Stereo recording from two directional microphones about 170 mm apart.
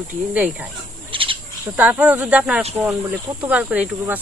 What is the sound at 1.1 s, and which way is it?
Cricket, 30° right (ahead or behind).